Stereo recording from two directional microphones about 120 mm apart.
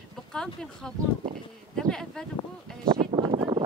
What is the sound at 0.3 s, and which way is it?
Speech, 5° left (ahead or behind).